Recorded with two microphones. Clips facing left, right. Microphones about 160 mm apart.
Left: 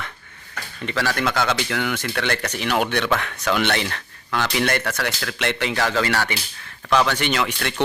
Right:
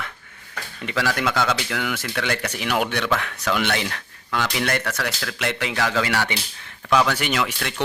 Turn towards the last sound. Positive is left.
turn(degrees=-5)  # may be behind; listen again after turning